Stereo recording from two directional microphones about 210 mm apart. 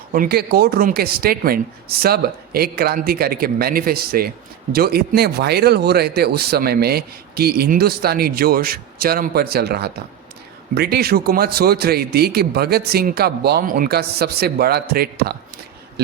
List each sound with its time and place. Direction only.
0.1 s speech: 45° right (ahead or behind)